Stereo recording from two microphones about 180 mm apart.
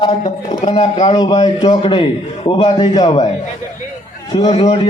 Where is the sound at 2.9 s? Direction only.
20° left (ahead or behind).